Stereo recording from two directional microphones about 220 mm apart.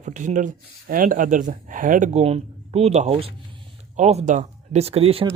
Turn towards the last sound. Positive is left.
turn(degrees=-25)  # may be behind; listen again after turning